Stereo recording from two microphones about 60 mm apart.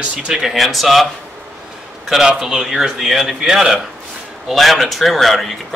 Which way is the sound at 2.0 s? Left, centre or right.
Centre.